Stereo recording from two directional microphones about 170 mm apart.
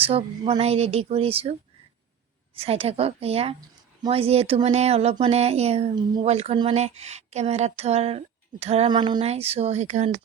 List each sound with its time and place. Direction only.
0.0 s speech: 35° right (ahead or behind)
2.6 s speech: 35° right (ahead or behind)
6.0 s speech: 25° right (ahead or behind)
6.2 s speech: 35° right (ahead or behind)